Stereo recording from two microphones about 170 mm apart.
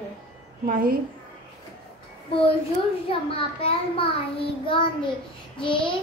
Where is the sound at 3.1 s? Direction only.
30° left (ahead or behind).